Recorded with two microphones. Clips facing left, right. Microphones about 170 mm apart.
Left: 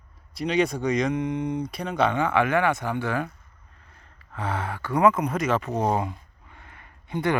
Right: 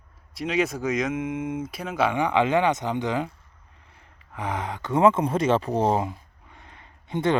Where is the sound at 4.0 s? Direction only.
15° right (ahead or behind).